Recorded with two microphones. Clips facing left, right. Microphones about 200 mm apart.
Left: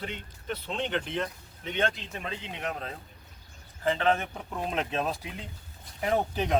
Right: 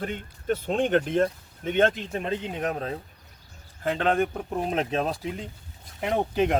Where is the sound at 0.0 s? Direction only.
50° right (ahead or behind).